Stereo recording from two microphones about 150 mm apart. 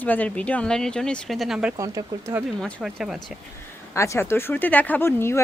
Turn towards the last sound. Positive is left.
turn(degrees=15)  # may be behind; listen again after turning